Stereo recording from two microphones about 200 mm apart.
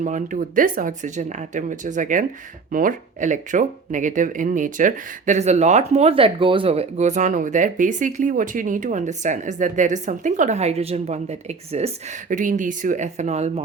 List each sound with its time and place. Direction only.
0.0 s speech: 40° right (ahead or behind)